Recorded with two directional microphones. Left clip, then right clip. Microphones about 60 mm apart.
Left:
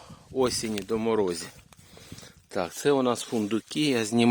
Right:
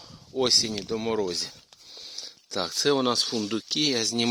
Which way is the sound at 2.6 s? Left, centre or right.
Left.